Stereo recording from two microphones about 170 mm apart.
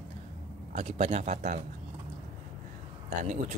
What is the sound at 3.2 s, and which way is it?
Speech, 45° right (ahead or behind).